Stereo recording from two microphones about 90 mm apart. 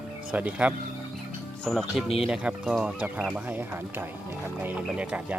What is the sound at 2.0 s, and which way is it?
Speech, 90° left.